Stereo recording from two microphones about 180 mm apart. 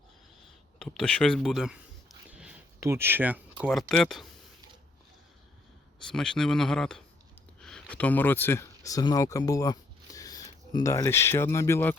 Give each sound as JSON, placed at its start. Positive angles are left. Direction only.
{"t": 0.8, "sound": "speech", "side_deg": 5}
{"t": 6.1, "sound": "speech", "side_deg": 5}